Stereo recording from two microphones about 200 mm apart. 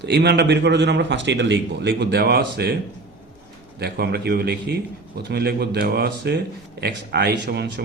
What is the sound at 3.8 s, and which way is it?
A man's voice, 55° right (ahead or behind).